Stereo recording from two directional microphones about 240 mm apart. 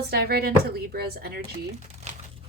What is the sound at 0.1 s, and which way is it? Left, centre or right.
Dishes, right.